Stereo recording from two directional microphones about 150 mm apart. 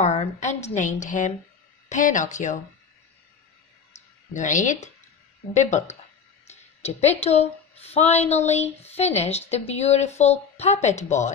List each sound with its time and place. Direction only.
0.0 s speech: 50° left (ahead or behind)
3.9 s a sound: 50° left (ahead or behind)
4.3 s speech: 55° left (ahead or behind)